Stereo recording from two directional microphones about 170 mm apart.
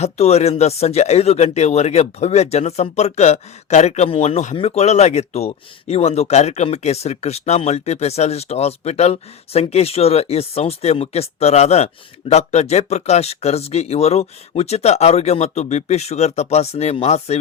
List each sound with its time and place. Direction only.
0.0 s speech: 40° left (ahead or behind)